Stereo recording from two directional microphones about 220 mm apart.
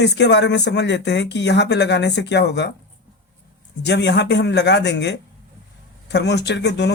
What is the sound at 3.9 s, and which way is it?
Speech, 50° left (ahead or behind).